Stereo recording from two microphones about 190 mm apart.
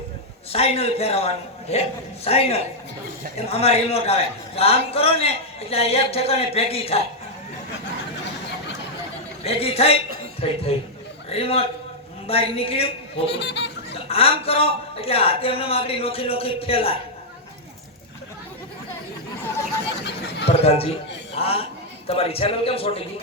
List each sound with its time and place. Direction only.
0.5 s a man's voice: 30° left (ahead or behind)
9.4 s a man's voice: 30° left (ahead or behind)
13.2 s speech: 65° left (ahead or behind)
14.1 s speech: 30° left (ahead or behind)
20.0 s chatter: 65° left (ahead or behind)
20.5 s a man's voice: 30° left (ahead or behind)